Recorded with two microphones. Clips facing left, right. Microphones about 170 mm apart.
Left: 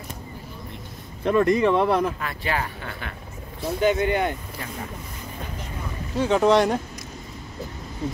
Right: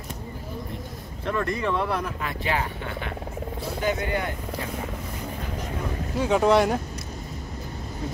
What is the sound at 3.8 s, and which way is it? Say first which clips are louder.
Speech: left 6 dB; 25° left (ahead or behind).